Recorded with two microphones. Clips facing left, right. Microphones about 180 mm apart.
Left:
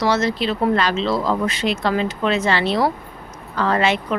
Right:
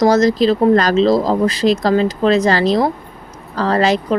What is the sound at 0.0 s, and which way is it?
Speech, 40° right (ahead or behind).